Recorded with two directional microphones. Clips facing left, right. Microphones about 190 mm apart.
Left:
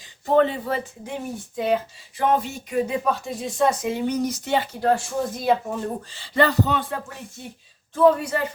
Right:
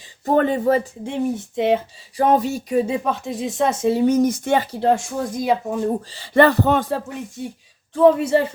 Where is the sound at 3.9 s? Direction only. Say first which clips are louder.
Right 7 dB; 45° right (ahead or behind).